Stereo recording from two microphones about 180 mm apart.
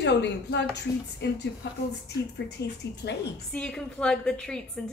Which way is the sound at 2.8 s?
70° left (ahead or behind).